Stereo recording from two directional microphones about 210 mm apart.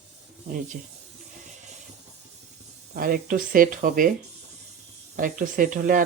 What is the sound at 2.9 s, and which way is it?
Speech, 45° right (ahead or behind).